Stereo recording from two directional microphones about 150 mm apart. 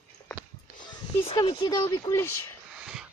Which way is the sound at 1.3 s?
30° left (ahead or behind).